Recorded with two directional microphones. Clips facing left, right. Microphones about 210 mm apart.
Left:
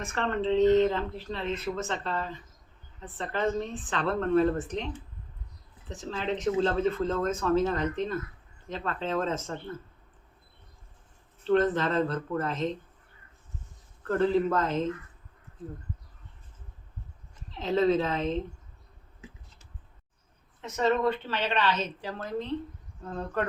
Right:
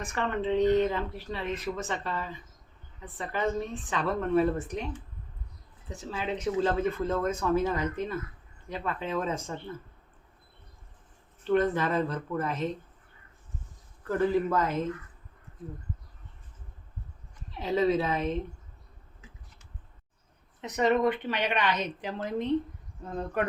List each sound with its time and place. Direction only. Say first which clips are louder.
0.0 s speech: left 1 dB; 10° right (ahead or behind)
5.9 s speech: left 2 dB; 10° right (ahead or behind)
11.4 s speech: left 1 dB; 10° right (ahead or behind)
14.2 s speech: left 1 dB; 10° right (ahead or behind)
17.5 s speech: left 1 dB; 10° right (ahead or behind)
20.6 s speech: right 1 dB; 15° right (ahead or behind)